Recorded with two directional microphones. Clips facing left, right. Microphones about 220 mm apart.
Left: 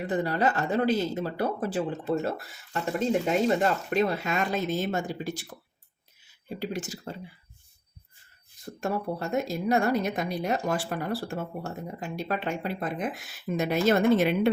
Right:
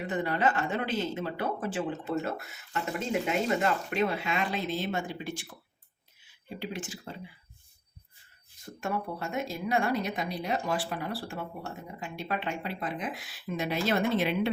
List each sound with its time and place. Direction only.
0.1 s speech: 35° left (ahead or behind)
6.6 s speech: 40° left (ahead or behind)
8.8 s a woman's voice: 40° left (ahead or behind)